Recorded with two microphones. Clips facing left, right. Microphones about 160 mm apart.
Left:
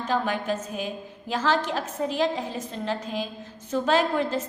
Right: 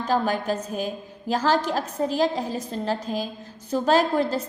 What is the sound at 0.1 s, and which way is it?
A woman's voice, 40° right (ahead or behind).